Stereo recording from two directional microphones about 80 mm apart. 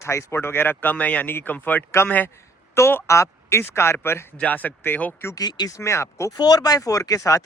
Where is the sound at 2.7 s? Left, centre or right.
Left.